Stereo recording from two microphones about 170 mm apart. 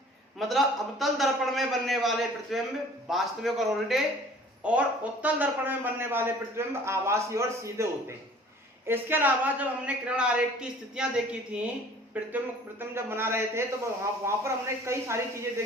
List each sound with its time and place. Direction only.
0.3 s a man's voice: centre (ahead or behind); by 7.9 s 15° right (ahead or behind)
8.9 s a man's voice: 10° right (ahead or behind)